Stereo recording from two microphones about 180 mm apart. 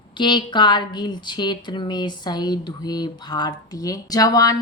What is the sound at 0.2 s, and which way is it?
Speech, 25° left (ahead or behind).